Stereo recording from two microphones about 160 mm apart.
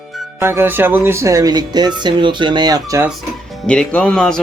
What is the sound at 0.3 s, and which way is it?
Speech, 15° right (ahead or behind).